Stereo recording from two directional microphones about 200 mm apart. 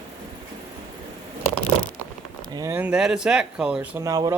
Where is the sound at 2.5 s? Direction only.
15° right (ahead or behind).